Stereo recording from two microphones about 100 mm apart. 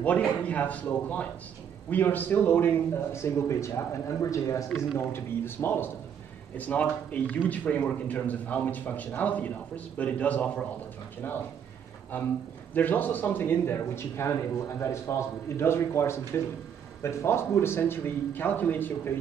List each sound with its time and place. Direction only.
0.0 s a man's voice: 15° left (ahead or behind); by 4.6 s 30° left (ahead or behind)
4.6 s speech: centre (ahead or behind)
4.9 s a man's voice: 25° left (ahead or behind)
12.7 s a man's voice: 20° left (ahead or behind)